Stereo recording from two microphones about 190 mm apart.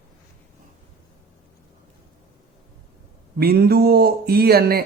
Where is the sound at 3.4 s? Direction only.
55° right (ahead or behind).